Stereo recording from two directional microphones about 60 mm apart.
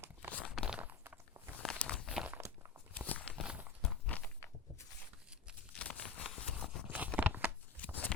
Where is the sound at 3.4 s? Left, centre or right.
Centre.